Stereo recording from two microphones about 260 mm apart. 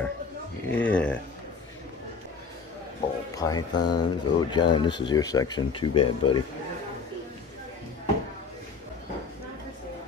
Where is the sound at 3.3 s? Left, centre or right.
Centre.